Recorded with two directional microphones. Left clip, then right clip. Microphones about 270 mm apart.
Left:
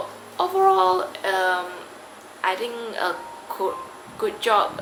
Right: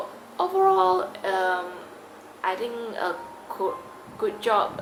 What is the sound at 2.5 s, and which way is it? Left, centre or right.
Speech, centre.